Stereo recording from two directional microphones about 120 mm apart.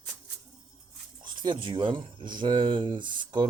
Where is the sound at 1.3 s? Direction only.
40° right (ahead or behind).